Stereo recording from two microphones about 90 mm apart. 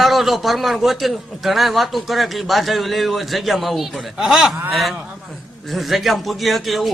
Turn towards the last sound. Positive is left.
turn(degrees=0)  # may be behind; listen again after turning